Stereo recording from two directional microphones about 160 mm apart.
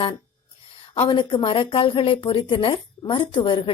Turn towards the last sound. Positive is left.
turn(degrees=30)  # may be behind; listen again after turning